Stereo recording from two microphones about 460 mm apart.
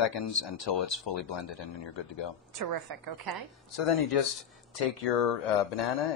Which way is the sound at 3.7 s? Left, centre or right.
Left.